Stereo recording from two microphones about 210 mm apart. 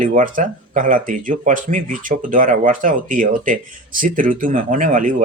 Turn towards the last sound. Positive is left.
turn(degrees=-40)  # may be behind; listen again after turning